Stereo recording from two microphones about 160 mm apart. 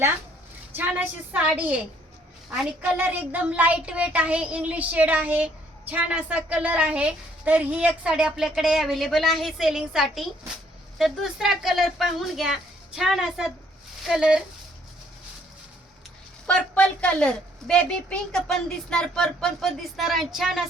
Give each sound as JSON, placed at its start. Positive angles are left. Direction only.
{"t": 0.8, "sound": "child singing", "side_deg": -10}
{"t": 3.0, "sound": "child singing", "side_deg": -10}
{"t": 10.9, "sound": "a woman's voice", "side_deg": 0}
{"t": 16.5, "sound": "a woman's voice", "side_deg": 5}